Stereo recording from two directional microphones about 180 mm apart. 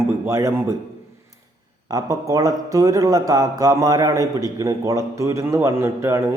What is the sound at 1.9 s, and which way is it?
Speech, 20° right (ahead or behind).